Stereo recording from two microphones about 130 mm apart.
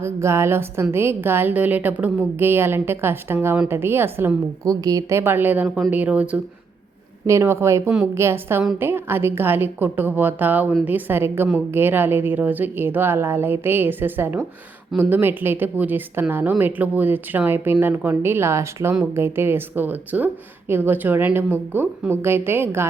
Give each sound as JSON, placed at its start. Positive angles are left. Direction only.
{"t": 0.0, "sound": "a woman's voice", "side_deg": -20}
{"t": 5.6, "sound": "speech", "side_deg": 0}
{"t": 5.9, "sound": "a woman's voice", "side_deg": -10}